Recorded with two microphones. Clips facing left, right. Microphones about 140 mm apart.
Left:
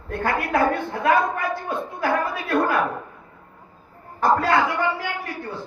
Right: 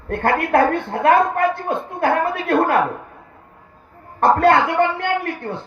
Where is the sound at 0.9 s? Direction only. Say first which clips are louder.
Right 5 dB; 55° right (ahead or behind).